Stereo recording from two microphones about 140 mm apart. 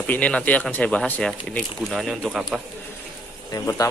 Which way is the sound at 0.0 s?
10° left (ahead or behind).